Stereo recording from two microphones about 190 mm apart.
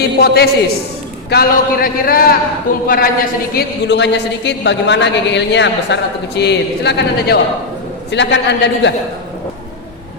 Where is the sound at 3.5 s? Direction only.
65° left (ahead or behind).